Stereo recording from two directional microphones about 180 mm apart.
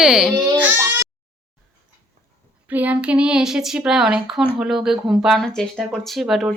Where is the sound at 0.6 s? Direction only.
10° right (ahead or behind).